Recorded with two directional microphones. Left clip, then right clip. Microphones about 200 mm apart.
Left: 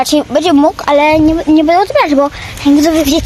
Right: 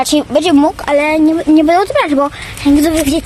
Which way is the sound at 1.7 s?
10° right (ahead or behind).